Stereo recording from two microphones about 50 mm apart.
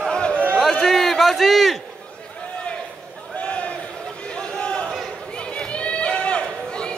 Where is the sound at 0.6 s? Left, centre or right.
Centre.